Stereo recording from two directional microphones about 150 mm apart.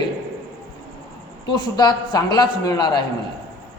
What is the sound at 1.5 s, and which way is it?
A man's voice, 30° left (ahead or behind).